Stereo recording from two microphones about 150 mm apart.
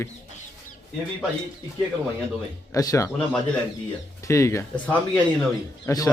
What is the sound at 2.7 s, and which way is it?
Speech, 20° left (ahead or behind).